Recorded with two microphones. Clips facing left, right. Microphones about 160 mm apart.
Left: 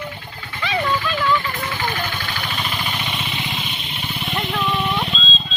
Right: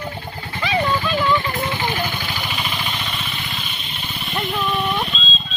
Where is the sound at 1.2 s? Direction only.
20° right (ahead or behind).